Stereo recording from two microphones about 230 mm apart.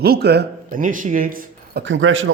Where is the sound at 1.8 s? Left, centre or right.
Right.